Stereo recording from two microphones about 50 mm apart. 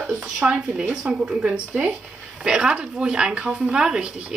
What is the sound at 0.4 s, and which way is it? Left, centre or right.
Speech, right.